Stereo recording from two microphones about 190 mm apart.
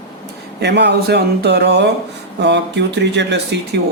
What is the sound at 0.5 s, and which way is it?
A man's voice, 65° right (ahead or behind).